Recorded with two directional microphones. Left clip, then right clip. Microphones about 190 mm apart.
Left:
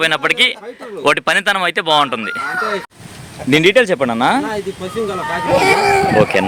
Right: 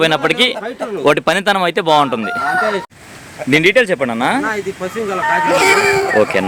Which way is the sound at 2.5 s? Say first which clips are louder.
Right 3 dB; 25° right (ahead or behind).